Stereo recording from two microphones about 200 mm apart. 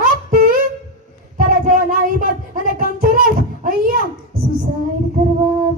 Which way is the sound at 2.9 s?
45° right (ahead or behind).